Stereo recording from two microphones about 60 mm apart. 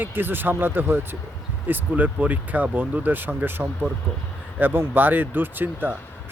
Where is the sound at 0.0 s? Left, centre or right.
Right.